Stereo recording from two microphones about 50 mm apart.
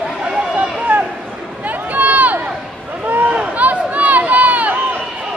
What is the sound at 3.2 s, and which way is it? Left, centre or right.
Run, right.